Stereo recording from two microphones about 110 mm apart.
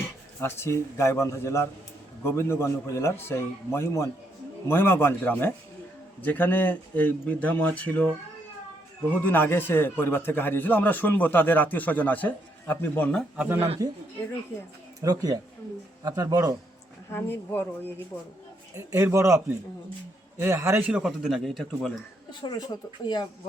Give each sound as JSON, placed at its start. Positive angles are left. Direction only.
{"t": 0.3, "sound": "a man's voice", "side_deg": 25}
{"t": 9.2, "sound": "a man's voice", "side_deg": 15}
{"t": 13.3, "sound": "speech", "side_deg": -15}
{"t": 15.0, "sound": "speech", "side_deg": -35}
{"t": 17.1, "sound": "a man's voice", "side_deg": 20}
{"t": 18.7, "sound": "speech", "side_deg": -25}
{"t": 20.4, "sound": "speech", "side_deg": -25}
{"t": 20.9, "sound": "speech", "side_deg": -5}
{"t": 22.3, "sound": "speech", "side_deg": 40}